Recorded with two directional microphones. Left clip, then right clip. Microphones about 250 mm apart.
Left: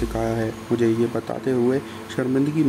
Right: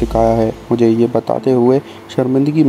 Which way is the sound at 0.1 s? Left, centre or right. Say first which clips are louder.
Right 12 dB; right.